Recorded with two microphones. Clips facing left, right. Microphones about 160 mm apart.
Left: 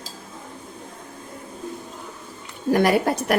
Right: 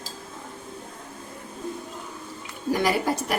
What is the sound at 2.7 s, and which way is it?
Speech, 60° left (ahead or behind).